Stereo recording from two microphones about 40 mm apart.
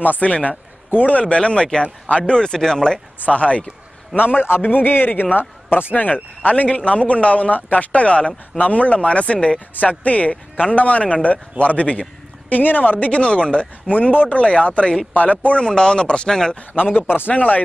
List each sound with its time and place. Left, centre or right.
0.0 s a man's voice: left; by 3.0 s centre
3.3 s a man's voice: left
4.2 s speech: left
6.4 s a man's voice: left
9.8 s a man's voice: left
13.1 s speech: left
13.9 s speech: left
14.4 s a man's voice: left
15.6 s speech: centre
17.3 s a man's voice: left